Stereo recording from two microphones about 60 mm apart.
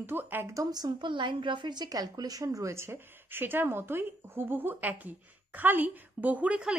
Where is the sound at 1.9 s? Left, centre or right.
Right.